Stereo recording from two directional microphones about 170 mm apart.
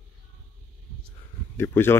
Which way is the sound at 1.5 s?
15° left (ahead or behind).